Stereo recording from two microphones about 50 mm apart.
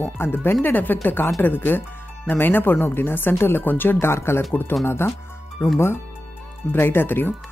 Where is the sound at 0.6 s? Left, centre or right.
Left.